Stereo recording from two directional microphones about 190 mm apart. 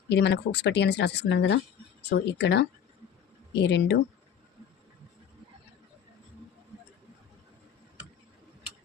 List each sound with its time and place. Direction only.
0.1 s speech: 65° left (ahead or behind)